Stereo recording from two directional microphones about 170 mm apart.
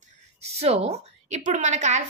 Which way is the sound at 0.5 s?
40° right (ahead or behind).